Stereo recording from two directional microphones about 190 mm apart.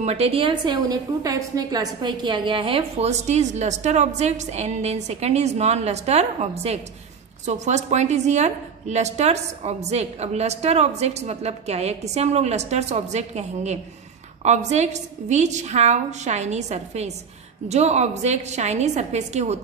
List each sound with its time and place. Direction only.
0.0 s a woman's voice: 35° right (ahead or behind)